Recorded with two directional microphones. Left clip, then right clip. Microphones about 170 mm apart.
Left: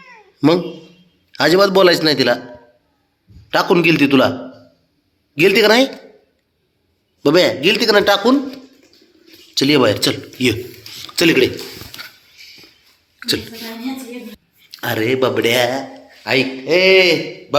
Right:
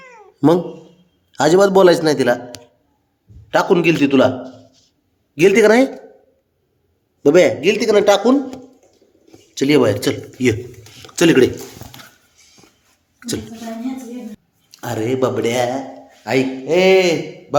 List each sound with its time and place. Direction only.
1.4 s a man's voice: 20° right (ahead or behind)
2.1 s a man's voice: 5° right (ahead or behind)
3.5 s a man's voice: centre (ahead or behind)
7.2 s a man's voice: 15° right (ahead or behind)
9.6 s a man's voice: 5° right (ahead or behind)
10.4 s a sound: 10° right (ahead or behind)
11.1 s a sound: 20° right (ahead or behind)
14.8 s a man's voice: 5° right (ahead or behind)